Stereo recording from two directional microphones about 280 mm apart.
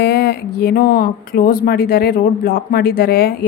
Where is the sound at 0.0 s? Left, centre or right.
Left.